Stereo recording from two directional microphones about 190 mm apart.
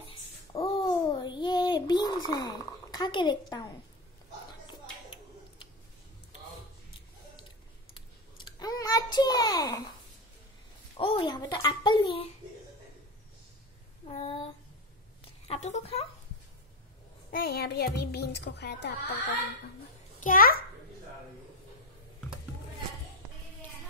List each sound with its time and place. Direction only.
0.5 s a sound: 25° left (ahead or behind)
7.9 s clicking: 25° left (ahead or behind)
11.0 s a child's voice: 30° left (ahead or behind)
14.0 s a sound: 30° left (ahead or behind)
15.4 s a woman's voice: 35° left (ahead or behind)
17.3 s a child's voice: 55° left (ahead or behind)
20.2 s a child's voice: 45° left (ahead or behind)